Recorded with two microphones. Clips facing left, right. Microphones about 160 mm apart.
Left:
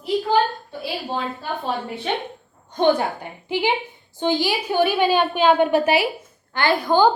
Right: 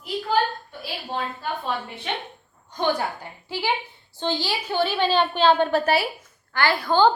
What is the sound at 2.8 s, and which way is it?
A woman's voice, 25° left (ahead or behind).